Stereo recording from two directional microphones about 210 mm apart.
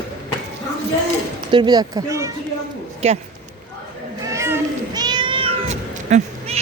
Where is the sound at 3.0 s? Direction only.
30° right (ahead or behind).